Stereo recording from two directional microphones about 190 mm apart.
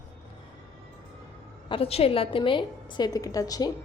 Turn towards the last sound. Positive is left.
turn(degrees=20)  # may be behind; listen again after turning